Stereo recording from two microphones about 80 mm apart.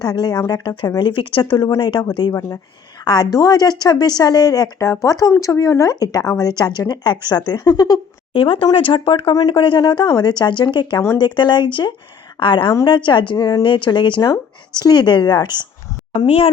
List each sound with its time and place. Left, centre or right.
0.0 s speech: left
0.9 s speech: left
8.4 s speech: left
10.2 s speech: left
12.4 s speech: left
13.3 s speech: left
13.6 s speech: left
14.7 s speech: left